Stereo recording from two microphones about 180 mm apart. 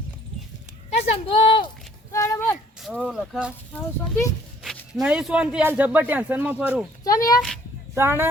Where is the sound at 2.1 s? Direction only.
15° left (ahead or behind).